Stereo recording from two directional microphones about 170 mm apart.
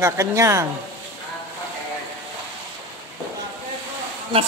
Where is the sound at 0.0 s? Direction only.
20° right (ahead or behind).